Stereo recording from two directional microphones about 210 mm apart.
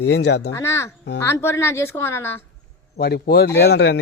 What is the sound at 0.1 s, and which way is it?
Speech, 55° left (ahead or behind).